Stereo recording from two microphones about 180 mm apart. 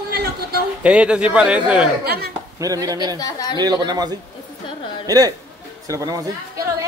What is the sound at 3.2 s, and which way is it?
Speech, 20° left (ahead or behind).